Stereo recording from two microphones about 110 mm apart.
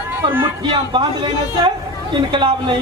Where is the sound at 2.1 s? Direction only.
45° right (ahead or behind).